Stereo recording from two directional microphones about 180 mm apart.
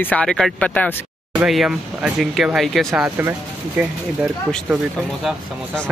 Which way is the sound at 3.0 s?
15° right (ahead or behind).